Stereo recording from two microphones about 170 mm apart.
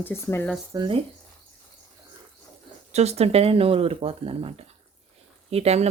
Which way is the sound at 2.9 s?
40° right (ahead or behind).